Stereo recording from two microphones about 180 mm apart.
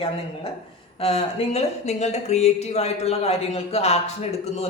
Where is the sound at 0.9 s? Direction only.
35° left (ahead or behind).